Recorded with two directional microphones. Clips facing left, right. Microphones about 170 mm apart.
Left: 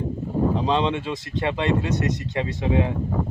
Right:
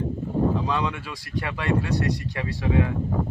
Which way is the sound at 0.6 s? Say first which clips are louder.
Left 4 dB; 25° left (ahead or behind).